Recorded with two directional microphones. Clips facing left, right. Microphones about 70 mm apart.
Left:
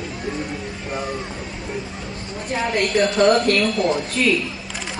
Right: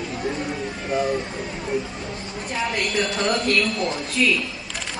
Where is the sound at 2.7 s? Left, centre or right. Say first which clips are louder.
Left 9 dB; left.